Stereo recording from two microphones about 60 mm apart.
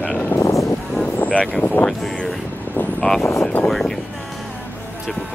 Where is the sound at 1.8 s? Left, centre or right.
Centre.